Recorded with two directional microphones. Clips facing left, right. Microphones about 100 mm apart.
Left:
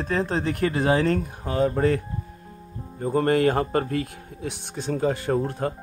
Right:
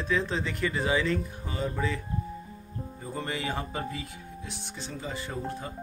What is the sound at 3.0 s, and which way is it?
Speech, 60° left (ahead or behind).